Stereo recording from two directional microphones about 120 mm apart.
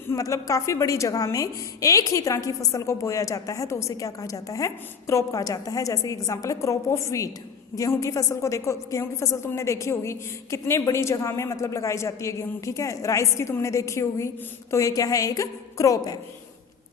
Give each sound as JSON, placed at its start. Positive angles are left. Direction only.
{"t": 0.1, "sound": "a woman's voice", "side_deg": 30}